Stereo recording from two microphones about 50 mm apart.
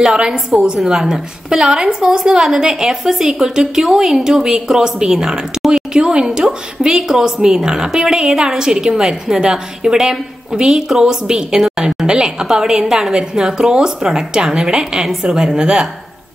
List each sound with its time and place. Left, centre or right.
0.0 s a woman's voice: centre